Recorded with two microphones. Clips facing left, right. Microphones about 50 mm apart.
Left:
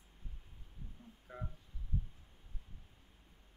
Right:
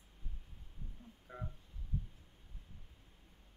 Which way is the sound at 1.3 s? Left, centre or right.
Centre.